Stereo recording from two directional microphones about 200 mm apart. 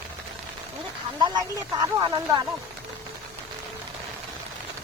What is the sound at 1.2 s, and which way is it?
Speech, 20° right (ahead or behind).